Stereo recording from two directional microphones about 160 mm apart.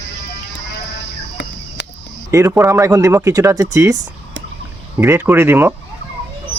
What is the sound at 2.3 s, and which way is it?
Speech, 15° right (ahead or behind).